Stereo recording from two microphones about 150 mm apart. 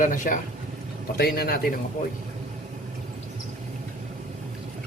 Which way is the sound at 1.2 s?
90° left.